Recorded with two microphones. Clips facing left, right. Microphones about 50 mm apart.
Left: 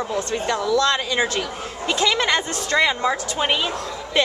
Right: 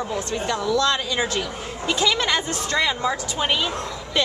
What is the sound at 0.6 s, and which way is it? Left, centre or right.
Speech, centre.